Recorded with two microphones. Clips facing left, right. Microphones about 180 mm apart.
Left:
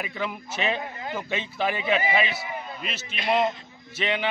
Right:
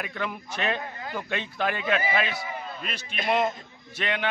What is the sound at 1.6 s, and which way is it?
Speech, 5° left (ahead or behind).